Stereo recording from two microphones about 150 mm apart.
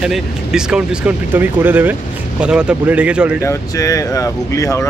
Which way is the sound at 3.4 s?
20° left (ahead or behind).